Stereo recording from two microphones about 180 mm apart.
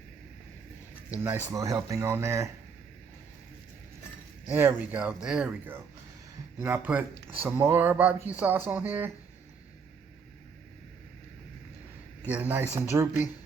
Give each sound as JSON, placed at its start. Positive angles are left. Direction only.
{"t": 1.5, "sound": "speech", "side_deg": -20}
{"t": 4.4, "sound": "speech", "side_deg": -10}
{"t": 12.3, "sound": "speech", "side_deg": -10}